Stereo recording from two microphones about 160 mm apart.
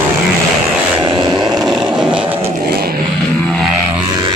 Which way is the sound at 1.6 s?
5° right (ahead or behind).